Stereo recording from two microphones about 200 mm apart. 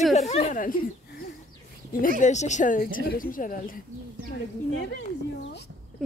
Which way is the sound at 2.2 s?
35° left (ahead or behind).